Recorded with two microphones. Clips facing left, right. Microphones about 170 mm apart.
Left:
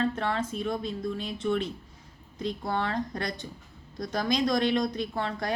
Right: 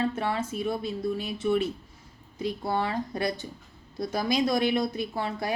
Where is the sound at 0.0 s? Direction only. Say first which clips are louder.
Even; 10° right (ahead or behind).